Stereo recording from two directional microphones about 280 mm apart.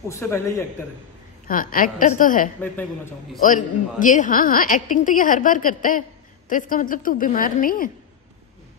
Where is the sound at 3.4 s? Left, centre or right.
Left.